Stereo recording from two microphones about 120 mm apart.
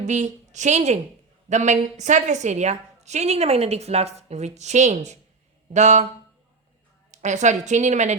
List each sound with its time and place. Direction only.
0.0 s a woman's voice: 75° right (ahead or behind)
7.1 s a woman's voice: 75° right (ahead or behind)